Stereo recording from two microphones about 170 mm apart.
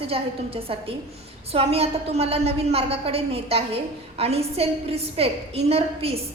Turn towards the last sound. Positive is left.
turn(degrees=-35)  # may be behind; listen again after turning